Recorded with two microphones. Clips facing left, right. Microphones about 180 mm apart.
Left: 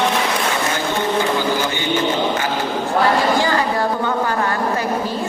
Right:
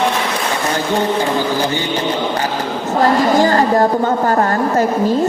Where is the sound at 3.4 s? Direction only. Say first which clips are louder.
Right 6 dB; 45° right (ahead or behind).